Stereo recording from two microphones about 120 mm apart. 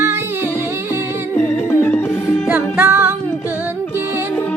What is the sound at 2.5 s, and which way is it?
Music, 20° right (ahead or behind).